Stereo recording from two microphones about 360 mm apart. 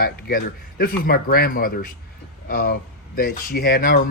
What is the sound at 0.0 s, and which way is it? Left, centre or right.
Speech, left.